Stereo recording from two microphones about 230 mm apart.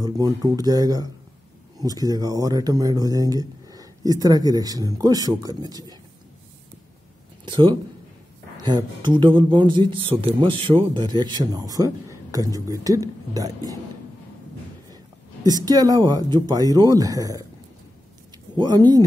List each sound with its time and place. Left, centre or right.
0.0 s speech: centre
7.4 s speech: right
15.4 s speech: centre
18.6 s speech: centre